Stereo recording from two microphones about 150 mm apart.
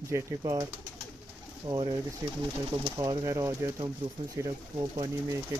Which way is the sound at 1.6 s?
30° right (ahead or behind).